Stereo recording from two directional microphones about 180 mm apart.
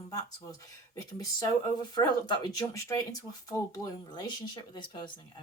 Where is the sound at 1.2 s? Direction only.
20° left (ahead or behind).